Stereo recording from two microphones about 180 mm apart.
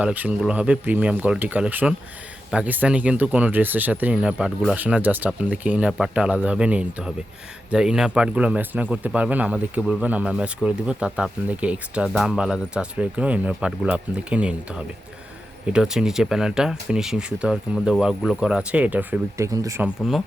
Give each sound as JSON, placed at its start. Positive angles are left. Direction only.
{"t": 0.0, "sound": "speech", "side_deg": -10}